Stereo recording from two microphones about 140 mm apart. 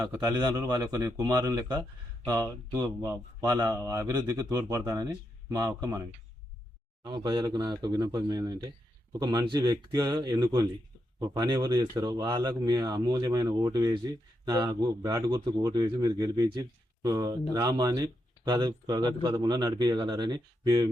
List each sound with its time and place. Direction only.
0.3 s speech: 30° right (ahead or behind)
7.0 s speech: 30° right (ahead or behind)